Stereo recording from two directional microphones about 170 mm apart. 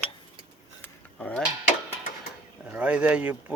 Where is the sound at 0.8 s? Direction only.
5° left (ahead or behind).